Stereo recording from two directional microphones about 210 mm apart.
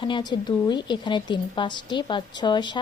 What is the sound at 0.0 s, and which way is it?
A woman's voice, 20° left (ahead or behind).